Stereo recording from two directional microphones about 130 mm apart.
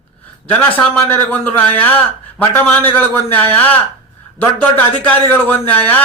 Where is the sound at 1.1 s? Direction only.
10° left (ahead or behind).